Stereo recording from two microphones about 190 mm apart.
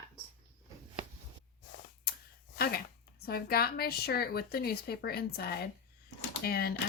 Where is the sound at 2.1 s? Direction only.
55° left (ahead or behind).